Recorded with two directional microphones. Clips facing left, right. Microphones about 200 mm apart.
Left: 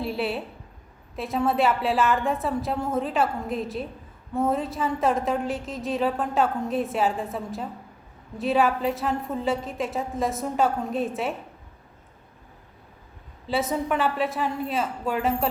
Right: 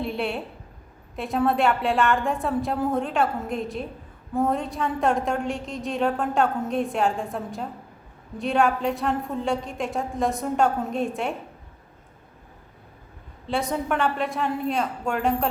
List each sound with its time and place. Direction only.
0.0 s a sound: centre (ahead or behind)
1.1 s a woman's voice: centre (ahead or behind)
13.5 s a woman's voice: centre (ahead or behind)